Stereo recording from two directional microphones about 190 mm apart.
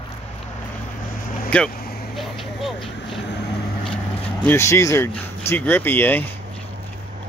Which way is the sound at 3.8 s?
30° left (ahead or behind).